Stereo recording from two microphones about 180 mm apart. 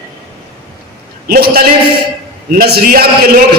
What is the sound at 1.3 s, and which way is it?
A man's voice, 55° right (ahead or behind).